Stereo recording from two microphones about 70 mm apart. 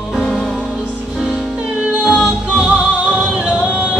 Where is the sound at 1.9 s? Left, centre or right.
Centre.